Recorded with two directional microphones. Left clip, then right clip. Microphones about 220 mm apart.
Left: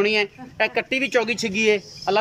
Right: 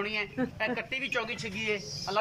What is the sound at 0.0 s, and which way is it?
Speech, 45° left (ahead or behind).